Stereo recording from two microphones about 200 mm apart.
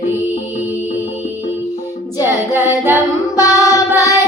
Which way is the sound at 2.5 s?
10° right (ahead or behind).